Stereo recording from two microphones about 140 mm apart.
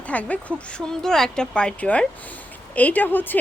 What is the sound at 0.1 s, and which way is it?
A woman's voice, 10° left (ahead or behind).